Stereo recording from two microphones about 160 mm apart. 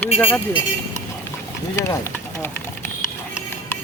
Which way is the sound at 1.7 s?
15° left (ahead or behind).